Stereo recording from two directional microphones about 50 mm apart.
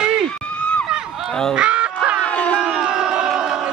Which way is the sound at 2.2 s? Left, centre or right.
Left.